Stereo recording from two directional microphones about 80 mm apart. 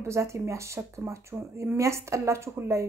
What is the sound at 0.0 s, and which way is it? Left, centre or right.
Speech, right.